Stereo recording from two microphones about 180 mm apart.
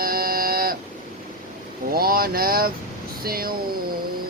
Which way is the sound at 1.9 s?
55° right (ahead or behind).